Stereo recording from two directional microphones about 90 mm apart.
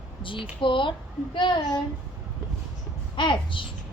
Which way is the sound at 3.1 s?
65° left (ahead or behind).